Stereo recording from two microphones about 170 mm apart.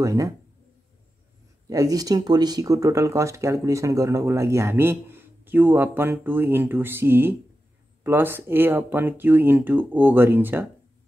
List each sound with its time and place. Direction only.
0.0 s speech: 20° right (ahead or behind)
1.7 s speech: 20° right (ahead or behind)